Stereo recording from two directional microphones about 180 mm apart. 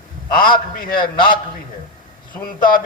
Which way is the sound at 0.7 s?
55° left (ahead or behind).